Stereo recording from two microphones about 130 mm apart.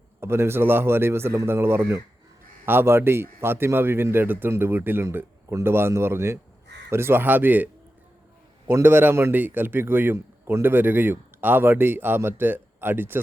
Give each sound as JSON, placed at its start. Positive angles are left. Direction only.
{"t": 0.2, "sound": "a man's voice", "side_deg": -20}